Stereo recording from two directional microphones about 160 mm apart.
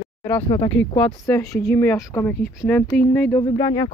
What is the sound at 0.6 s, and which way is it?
Speech, 10° left (ahead or behind).